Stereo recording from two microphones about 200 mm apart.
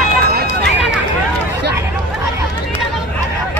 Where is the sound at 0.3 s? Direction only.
50° right (ahead or behind).